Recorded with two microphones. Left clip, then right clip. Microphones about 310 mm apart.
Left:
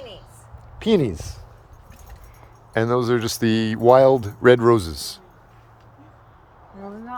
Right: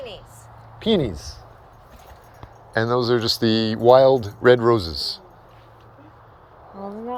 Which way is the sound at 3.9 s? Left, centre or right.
Centre.